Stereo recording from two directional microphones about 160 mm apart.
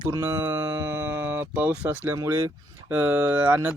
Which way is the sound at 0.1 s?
20° right (ahead or behind).